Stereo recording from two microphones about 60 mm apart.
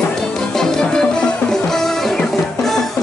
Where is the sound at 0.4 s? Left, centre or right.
Centre.